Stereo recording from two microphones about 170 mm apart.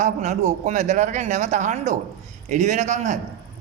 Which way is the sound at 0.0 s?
45° right (ahead or behind).